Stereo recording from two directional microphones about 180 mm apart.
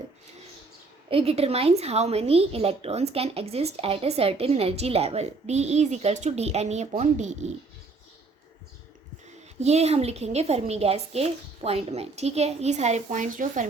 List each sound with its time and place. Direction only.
1.1 s a woman's voice: 35° right (ahead or behind)
9.6 s a woman's voice: 35° right (ahead or behind)